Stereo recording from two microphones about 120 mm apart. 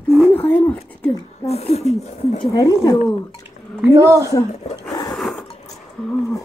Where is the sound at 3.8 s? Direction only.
25° right (ahead or behind).